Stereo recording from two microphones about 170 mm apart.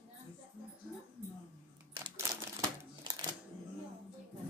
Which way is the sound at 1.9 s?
15° right (ahead or behind).